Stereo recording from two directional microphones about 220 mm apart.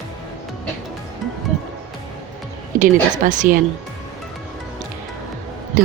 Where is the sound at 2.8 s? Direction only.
35° right (ahead or behind).